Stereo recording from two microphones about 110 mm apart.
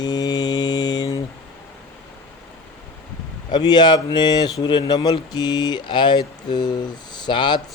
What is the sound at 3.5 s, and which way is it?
Speech, 40° left (ahead or behind).